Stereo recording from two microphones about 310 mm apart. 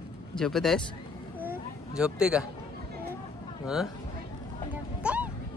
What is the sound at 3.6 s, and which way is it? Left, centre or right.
Speech, centre.